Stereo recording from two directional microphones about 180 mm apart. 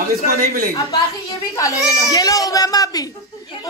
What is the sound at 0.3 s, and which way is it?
Speech, 55° right (ahead or behind).